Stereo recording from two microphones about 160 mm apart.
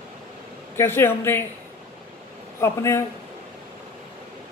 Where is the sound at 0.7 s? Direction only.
15° left (ahead or behind).